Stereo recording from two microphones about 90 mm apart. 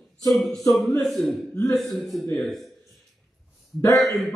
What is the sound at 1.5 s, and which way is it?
Speech, 40° left (ahead or behind).